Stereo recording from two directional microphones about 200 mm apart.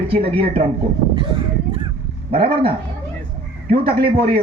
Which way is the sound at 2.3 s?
25° right (ahead or behind).